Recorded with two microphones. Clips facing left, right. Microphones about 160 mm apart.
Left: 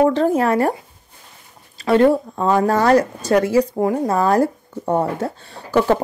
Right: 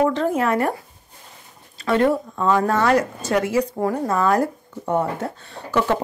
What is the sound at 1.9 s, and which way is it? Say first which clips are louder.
A woman's voice: left 4 dB; 35° left (ahead or behind).